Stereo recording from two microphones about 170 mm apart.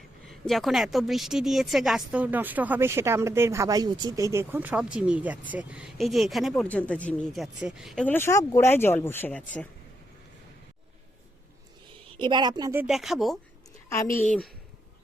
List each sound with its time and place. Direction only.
0.3 s a woman's voice: centre (ahead or behind)
8.0 s speech: 15° left (ahead or behind)
12.1 s a woman's voice: 25° right (ahead or behind)
12.9 s a woman's voice: centre (ahead or behind)
13.9 s speech: 15° left (ahead or behind)